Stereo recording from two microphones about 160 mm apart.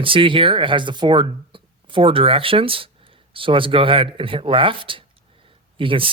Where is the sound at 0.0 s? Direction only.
35° right (ahead or behind).